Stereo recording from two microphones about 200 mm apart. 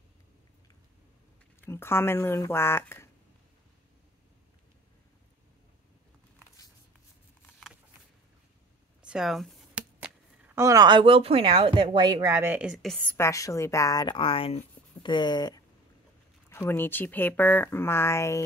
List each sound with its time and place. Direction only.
1.6 s speech: 10° left (ahead or behind)
9.0 s speech: centre (ahead or behind); by 18.4 s 15° left (ahead or behind)